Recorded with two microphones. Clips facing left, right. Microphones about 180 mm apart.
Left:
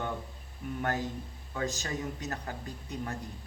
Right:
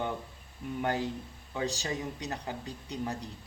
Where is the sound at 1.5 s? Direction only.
20° right (ahead or behind).